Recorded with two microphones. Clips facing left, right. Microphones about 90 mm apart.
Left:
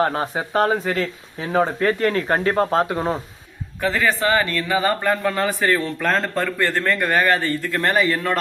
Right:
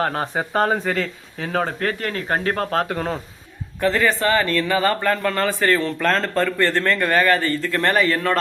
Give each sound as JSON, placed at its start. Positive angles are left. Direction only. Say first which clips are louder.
{"t": 0.0, "sound": "speech", "louder": "left 1 dB", "side_deg": 5}
{"t": 1.8, "sound": "speech", "louder": "left 5 dB", "side_deg": 30}
{"t": 2.6, "sound": "speech", "louder": "left 2 dB", "side_deg": 20}
{"t": 3.8, "sound": "speech", "louder": "right 1 dB", "side_deg": 5}
{"t": 4.4, "sound": "speech", "louder": "right 1 dB", "side_deg": 15}